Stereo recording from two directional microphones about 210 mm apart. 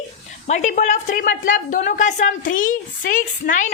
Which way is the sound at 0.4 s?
35° left (ahead or behind).